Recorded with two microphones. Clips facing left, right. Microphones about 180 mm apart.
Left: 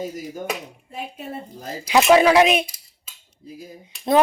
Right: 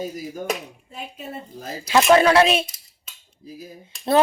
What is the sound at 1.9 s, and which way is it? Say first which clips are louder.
Speech: left 1 dB; 10° left (ahead or behind).